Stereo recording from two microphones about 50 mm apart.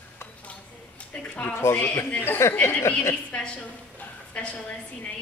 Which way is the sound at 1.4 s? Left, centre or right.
Left.